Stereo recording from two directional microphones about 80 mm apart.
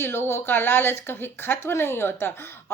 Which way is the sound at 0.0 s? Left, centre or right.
Left.